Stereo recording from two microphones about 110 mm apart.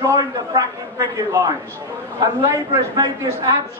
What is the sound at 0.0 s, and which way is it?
A man's voice, 30° right (ahead or behind).